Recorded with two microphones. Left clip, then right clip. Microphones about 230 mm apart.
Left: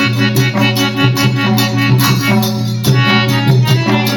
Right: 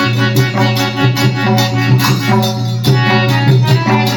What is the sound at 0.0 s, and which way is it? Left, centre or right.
Music, left.